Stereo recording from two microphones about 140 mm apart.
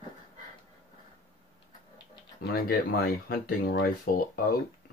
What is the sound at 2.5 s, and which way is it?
Speech, 90° left.